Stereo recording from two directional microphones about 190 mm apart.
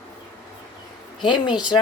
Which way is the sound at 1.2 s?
25° left (ahead or behind).